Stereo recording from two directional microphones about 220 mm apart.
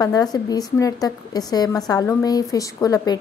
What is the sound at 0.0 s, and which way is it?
A woman's voice, 15° left (ahead or behind).